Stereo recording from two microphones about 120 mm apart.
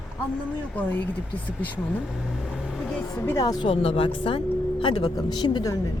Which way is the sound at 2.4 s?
5° right (ahead or behind).